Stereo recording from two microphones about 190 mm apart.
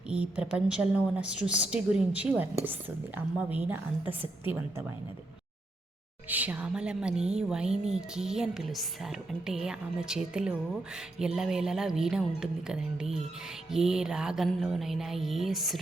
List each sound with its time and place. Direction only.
0.1 s a woman's voice: 5° right (ahead or behind)
6.2 s a woman's voice: 10° right (ahead or behind)